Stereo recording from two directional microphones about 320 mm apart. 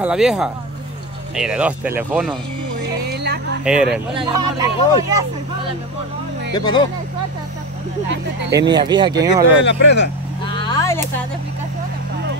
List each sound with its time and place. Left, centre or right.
0.0 s speech: centre
3.1 s music: right
3.6 s speech: centre
6.5 s speech: centre
8.5 s speech: centre
9.6 s speech: left
10.4 s a sound: centre